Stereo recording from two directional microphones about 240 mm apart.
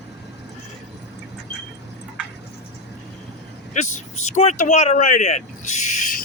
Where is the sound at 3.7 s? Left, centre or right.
Left.